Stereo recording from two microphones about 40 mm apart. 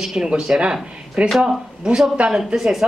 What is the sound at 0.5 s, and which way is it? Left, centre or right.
Speech, right.